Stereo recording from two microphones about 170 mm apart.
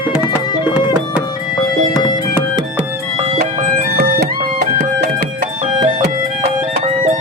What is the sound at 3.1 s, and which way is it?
Music, 35° right (ahead or behind).